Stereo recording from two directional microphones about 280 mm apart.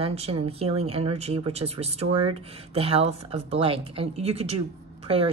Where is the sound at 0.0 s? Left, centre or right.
Right.